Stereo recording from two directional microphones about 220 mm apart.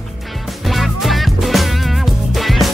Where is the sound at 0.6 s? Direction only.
Centre (ahead or behind).